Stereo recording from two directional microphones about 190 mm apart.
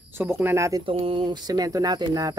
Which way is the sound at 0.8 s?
25° right (ahead or behind).